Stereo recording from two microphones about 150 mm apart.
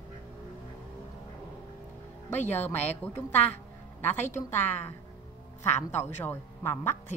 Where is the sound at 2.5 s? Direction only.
15° left (ahead or behind).